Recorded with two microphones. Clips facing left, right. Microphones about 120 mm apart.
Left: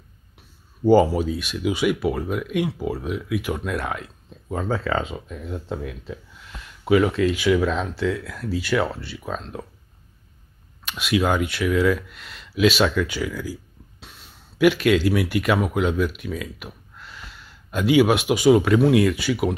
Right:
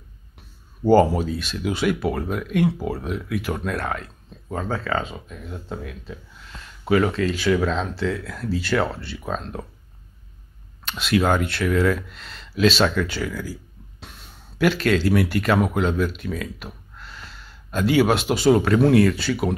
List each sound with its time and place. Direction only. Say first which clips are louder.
0.8 s speech: even; 10° left (ahead or behind)
10.9 s speech: right 1 dB; 10° left (ahead or behind)
13.9 s a sound: right 3 dB; centre (ahead or behind)
14.6 s speech: left 2 dB; 15° left (ahead or behind)